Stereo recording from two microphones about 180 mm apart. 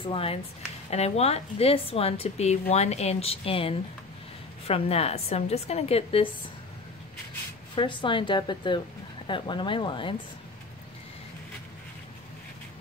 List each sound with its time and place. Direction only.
0.0 s a woman's voice: 30° left (ahead or behind)
7.7 s speech: 25° left (ahead or behind)